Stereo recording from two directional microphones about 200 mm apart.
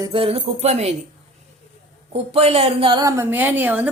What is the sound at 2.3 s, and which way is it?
Speech, 30° right (ahead or behind).